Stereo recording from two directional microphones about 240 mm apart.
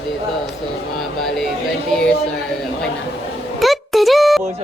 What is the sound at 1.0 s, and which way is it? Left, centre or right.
Speech, centre.